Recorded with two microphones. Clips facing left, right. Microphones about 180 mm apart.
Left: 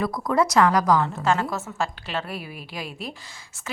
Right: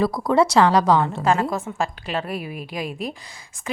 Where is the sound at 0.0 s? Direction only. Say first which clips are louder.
Right 4 dB; 30° right (ahead or behind).